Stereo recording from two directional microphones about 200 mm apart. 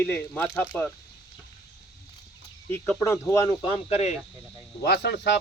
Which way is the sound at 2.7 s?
10° left (ahead or behind).